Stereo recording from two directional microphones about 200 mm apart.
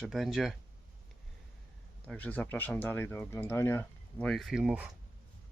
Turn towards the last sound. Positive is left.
turn(degrees=-5)  # may be behind; listen again after turning